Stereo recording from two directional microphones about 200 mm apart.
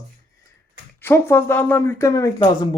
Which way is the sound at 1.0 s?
10° left (ahead or behind).